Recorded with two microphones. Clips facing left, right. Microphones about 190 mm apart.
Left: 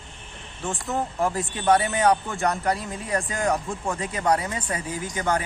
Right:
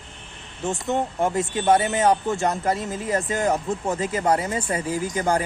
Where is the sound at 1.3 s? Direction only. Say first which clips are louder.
Right 5 dB; centre (ahead or behind).